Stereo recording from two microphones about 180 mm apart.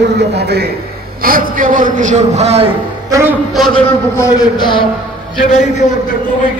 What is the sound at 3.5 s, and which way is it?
Speech, centre (ahead or behind).